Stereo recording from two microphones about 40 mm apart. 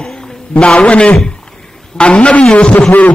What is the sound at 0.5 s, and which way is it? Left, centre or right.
A man's voice, left.